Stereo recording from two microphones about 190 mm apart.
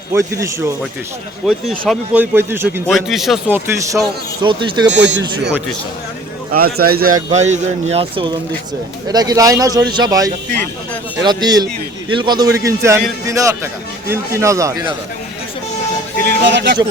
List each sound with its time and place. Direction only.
0.1 s a man's voice: 15° right (ahead or behind)
1.5 s a man's voice: 5° left (ahead or behind)
2.1 s a man's voice: 10° right (ahead or behind)
2.8 s a man's voice: centre (ahead or behind)
4.4 s a man's voice: 25° right (ahead or behind)
4.9 s speech: 65° right (ahead or behind)
6.5 s speech: 55° right (ahead or behind)
7.3 s a man's voice: 35° right (ahead or behind); by 14.8 s 15° right (ahead or behind)
16.2 s speech: 65° right (ahead or behind)